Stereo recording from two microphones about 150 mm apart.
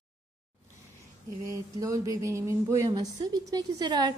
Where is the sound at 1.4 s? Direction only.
20° right (ahead or behind).